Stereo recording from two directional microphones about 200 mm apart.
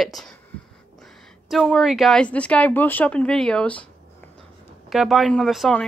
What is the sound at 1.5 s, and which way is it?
Speech, centre (ahead or behind).